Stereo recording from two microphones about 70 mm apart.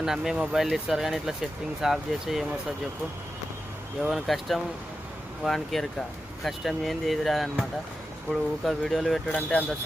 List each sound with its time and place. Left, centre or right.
0.0 s speech: centre
4.1 s speech: centre
9.3 s speech: centre